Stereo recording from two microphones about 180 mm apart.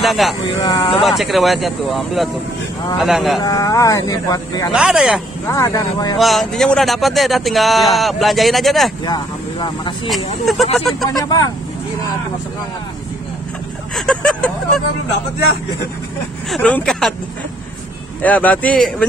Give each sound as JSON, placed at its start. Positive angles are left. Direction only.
{"t": 0.0, "sound": "speech", "side_deg": 0}
{"t": 0.6, "sound": "speech", "side_deg": 20}
{"t": 1.0, "sound": "speech", "side_deg": 0}
{"t": 3.3, "sound": "speech", "side_deg": 20}
{"t": 4.7, "sound": "speech", "side_deg": -5}
{"t": 5.5, "sound": "speech", "side_deg": 20}
{"t": 6.1, "sound": "speech", "side_deg": 0}
{"t": 9.0, "sound": "speech", "side_deg": 25}
{"t": 10.4, "sound": "speech", "side_deg": 0}
{"t": 11.1, "sound": "speech", "side_deg": 20}
{"t": 13.9, "sound": "speech", "side_deg": 0}
{"t": 16.4, "sound": "speech", "side_deg": 5}
{"t": 18.2, "sound": "speech", "side_deg": 10}